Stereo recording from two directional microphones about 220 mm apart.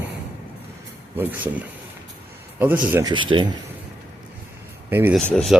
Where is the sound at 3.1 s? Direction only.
20° right (ahead or behind).